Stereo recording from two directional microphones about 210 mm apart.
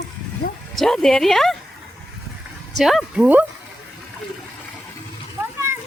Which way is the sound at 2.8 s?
Centre (ahead or behind).